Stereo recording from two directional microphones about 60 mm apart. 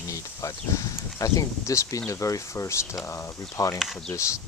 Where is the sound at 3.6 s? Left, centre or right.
Left.